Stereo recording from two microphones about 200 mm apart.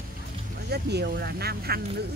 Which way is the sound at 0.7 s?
55° right (ahead or behind).